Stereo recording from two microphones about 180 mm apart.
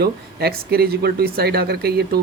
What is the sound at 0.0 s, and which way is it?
Speech, 60° right (ahead or behind).